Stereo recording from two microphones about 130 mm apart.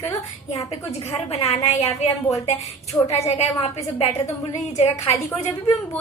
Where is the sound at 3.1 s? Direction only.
55° left (ahead or behind).